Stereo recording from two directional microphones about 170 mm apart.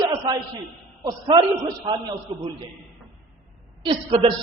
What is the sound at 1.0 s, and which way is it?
Speech, 25° right (ahead or behind).